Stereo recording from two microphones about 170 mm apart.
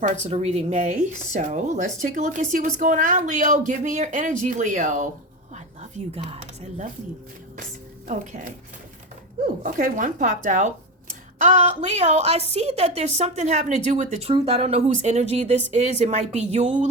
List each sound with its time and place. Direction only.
0.0 s speech: 40° right (ahead or behind)
8.0 s speech: 45° right (ahead or behind)
9.6 s a woman's voice: 50° right (ahead or behind)